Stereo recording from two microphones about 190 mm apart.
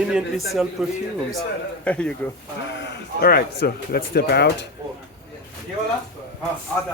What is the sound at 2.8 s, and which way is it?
Speech, 55° left (ahead or behind).